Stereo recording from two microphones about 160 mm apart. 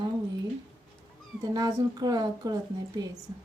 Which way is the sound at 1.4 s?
25° right (ahead or behind).